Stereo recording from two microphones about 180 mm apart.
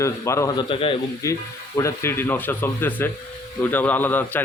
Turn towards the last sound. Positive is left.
turn(degrees=10)  # may be behind; listen again after turning